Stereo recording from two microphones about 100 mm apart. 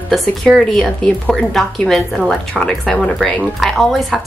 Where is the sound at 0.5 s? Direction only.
5° left (ahead or behind).